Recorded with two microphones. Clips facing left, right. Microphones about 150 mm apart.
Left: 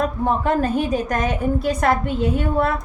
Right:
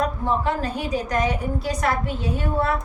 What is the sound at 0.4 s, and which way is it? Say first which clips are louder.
A woman's voice: left 6 dB; 50° left (ahead or behind).